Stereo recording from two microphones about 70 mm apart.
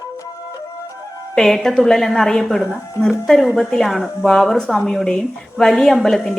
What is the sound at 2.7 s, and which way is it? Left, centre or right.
Speech, left.